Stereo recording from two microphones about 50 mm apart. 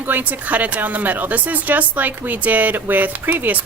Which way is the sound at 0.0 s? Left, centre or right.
Right.